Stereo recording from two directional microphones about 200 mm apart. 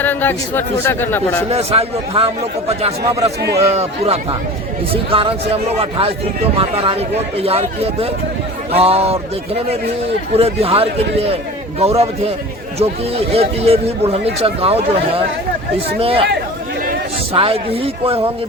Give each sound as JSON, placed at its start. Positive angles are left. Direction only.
{"t": 0.0, "sound": "speech", "side_deg": 10}
{"t": 1.5, "sound": "a man's voice", "side_deg": -30}
{"t": 8.7, "sound": "a man's voice", "side_deg": -30}
{"t": 10.3, "sound": "a man's voice", "side_deg": -30}
{"t": 17.3, "sound": "a man's voice", "side_deg": -25}